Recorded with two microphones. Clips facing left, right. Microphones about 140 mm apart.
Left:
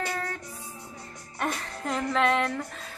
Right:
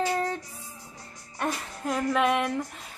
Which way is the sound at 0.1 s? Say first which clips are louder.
Right 5 dB; 20° right (ahead or behind).